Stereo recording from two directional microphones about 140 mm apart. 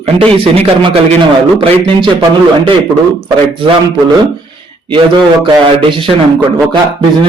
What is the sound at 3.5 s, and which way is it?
Speech, 35° right (ahead or behind).